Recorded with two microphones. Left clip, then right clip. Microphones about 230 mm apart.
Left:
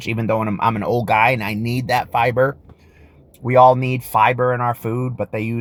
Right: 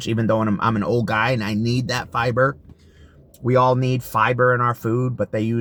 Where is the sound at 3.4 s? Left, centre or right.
Left.